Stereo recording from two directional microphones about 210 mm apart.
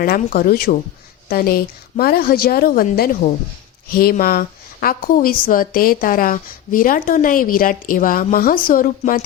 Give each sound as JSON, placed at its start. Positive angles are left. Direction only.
{"t": 0.0, "sound": "a woman's voice", "side_deg": 45}